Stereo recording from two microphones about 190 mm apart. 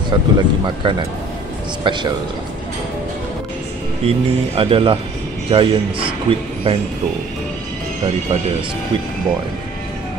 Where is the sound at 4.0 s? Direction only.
30° right (ahead or behind).